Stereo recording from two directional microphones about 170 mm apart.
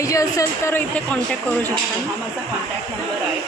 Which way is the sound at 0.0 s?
20° left (ahead or behind).